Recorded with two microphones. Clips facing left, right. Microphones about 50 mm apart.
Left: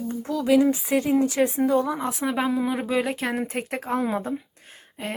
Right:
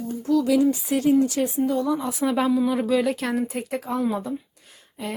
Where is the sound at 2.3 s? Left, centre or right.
Centre.